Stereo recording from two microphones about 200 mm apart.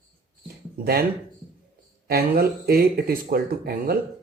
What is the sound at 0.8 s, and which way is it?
Speech, 50° right (ahead or behind).